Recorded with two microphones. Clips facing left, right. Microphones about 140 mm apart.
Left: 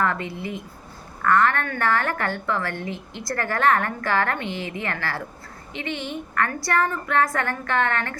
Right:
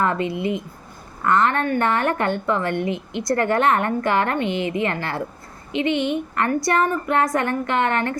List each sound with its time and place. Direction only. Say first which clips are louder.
0.0 s speech: right 4 dB; 20° right (ahead or behind)